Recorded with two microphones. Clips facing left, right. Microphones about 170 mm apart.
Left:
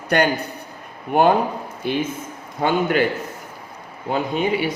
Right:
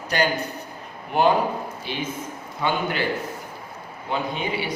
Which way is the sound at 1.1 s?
50° left (ahead or behind).